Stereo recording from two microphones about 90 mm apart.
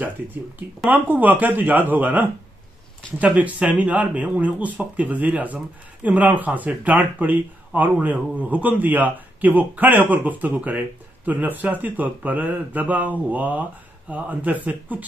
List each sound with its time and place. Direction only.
0.0 s speech: 20° right (ahead or behind)